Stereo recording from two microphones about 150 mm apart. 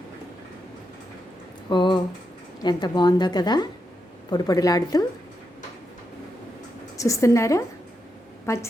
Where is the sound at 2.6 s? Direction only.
30° left (ahead or behind).